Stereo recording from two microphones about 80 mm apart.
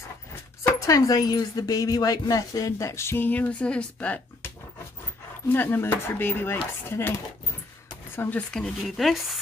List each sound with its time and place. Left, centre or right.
0.7 s speech: left; by 4.2 s centre
5.5 s dishes: left
8.2 s dishes: left
8.5 s speech: centre